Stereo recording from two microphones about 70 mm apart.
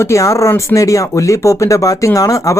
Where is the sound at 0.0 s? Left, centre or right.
Left.